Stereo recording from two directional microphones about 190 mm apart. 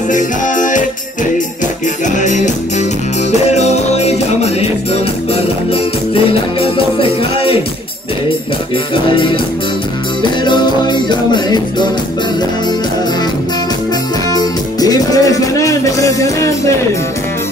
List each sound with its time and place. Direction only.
0.1 s music: 40° left (ahead or behind)
2.0 s music: 40° left (ahead or behind)
8.9 s music: 25° left (ahead or behind)
10.4 s music: 25° left (ahead or behind)
14.3 s music: 20° left (ahead or behind)